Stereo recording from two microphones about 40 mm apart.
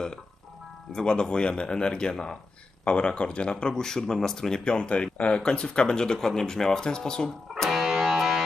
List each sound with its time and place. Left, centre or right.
0.9 s speech: centre
7.7 s music: centre